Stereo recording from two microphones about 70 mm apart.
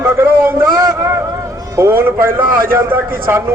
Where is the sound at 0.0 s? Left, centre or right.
Right.